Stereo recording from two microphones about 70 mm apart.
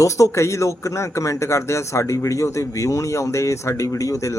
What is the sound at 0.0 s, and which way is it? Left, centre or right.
Speech, left.